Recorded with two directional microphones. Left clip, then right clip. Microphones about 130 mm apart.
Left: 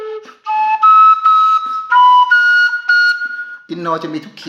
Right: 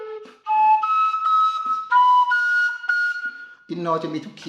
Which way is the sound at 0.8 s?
90° left.